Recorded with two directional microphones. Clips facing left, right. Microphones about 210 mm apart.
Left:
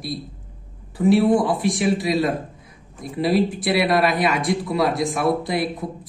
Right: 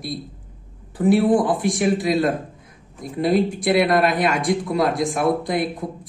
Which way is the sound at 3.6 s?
50° right (ahead or behind).